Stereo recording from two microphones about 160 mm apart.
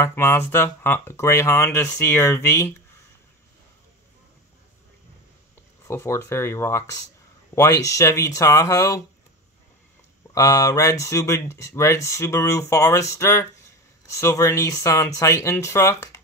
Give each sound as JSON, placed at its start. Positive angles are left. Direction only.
{"t": 0.0, "sound": "speech", "side_deg": 15}
{"t": 5.9, "sound": "speech", "side_deg": 15}
{"t": 10.3, "sound": "speech", "side_deg": 20}